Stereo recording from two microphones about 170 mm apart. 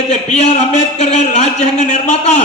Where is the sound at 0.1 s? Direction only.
40° left (ahead or behind).